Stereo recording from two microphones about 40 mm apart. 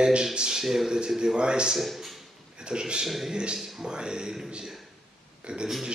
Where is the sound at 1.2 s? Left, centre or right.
Right.